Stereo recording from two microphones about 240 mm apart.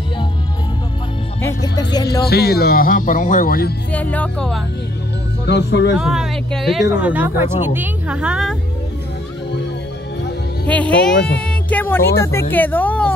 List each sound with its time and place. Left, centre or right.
1.4 s speech: centre
2.2 s speech: left
3.9 s speech: centre
5.5 s speech: left
5.9 s speech: centre
10.7 s speech: centre